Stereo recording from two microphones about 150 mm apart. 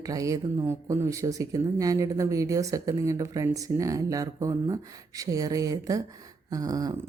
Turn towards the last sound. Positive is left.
turn(degrees=-25)  # may be behind; listen again after turning